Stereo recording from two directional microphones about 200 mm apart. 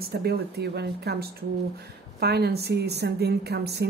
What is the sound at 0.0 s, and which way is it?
A woman's voice, 55° right (ahead or behind).